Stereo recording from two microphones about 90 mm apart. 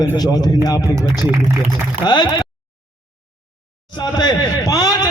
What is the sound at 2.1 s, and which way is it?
Speech, 55° left (ahead or behind).